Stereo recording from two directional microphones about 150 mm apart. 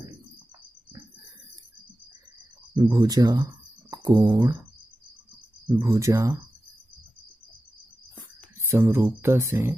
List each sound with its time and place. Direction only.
2.7 s speech: 25° right (ahead or behind)
5.7 s speech: 20° right (ahead or behind)
8.5 s speech: 20° right (ahead or behind)